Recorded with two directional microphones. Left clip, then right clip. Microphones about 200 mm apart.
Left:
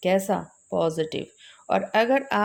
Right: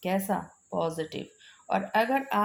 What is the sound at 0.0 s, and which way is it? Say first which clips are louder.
A woman's voice: left 7 dB; 55° left (ahead or behind).